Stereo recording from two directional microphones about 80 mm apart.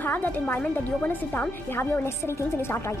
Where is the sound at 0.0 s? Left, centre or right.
Left.